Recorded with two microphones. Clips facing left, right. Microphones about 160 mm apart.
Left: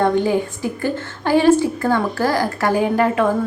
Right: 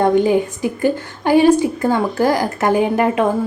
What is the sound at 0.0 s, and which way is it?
A woman's voice, 15° right (ahead or behind).